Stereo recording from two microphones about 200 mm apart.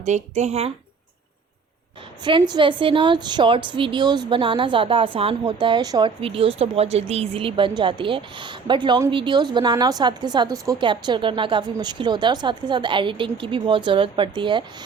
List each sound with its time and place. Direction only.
0.0 s speech: 35° right (ahead or behind)
2.2 s a woman's voice: 20° right (ahead or behind)